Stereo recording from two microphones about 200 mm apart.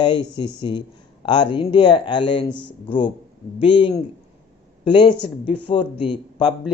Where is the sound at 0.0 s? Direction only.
25° left (ahead or behind).